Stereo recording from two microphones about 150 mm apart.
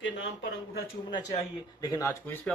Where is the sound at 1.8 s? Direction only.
25° left (ahead or behind).